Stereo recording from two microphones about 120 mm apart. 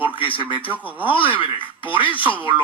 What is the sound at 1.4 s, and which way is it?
Speech, 45° left (ahead or behind).